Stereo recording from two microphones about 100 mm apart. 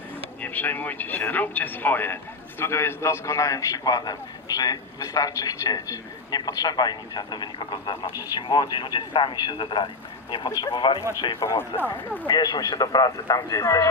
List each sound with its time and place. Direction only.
0.4 s a man's voice: 20° left (ahead or behind); by 11.0 s 55° left (ahead or behind)
11.3 s speech: 25° left (ahead or behind)
12.3 s a man's voice: 45° left (ahead or behind)